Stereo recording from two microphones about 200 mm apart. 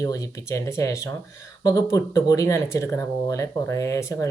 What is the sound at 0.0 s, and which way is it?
Speech, 15° left (ahead or behind).